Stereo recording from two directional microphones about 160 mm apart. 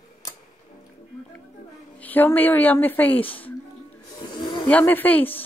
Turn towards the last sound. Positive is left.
turn(degrees=10)  # may be behind; listen again after turning